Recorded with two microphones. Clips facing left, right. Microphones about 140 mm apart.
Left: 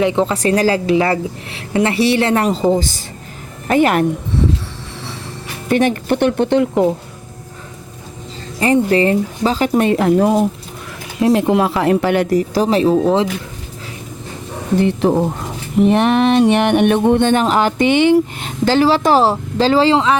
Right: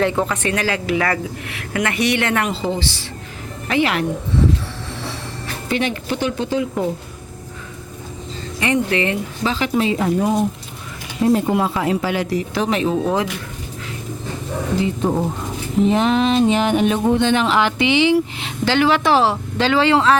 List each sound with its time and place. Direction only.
0.0 s a woman's voice: 15° left (ahead or behind)
0.3 s a woman's voice: 35° left (ahead or behind)
3.7 s music: 45° left (ahead or behind)
5.6 s speech: 45° left (ahead or behind)
8.6 s music: 35° left (ahead or behind); by 10.4 s 65° left (ahead or behind)
11.2 s speech: 90° left; by 13.2 s 30° left (ahead or behind)
14.8 s speech: 70° left (ahead or behind)
15.8 s music: 60° left (ahead or behind); by 20.0 s 35° left (ahead or behind)